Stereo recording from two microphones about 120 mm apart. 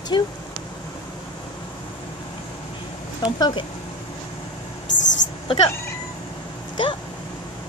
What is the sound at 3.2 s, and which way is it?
Speech, 35° left (ahead or behind).